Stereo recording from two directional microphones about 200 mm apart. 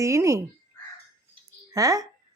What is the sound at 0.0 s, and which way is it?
Speech, 15° right (ahead or behind).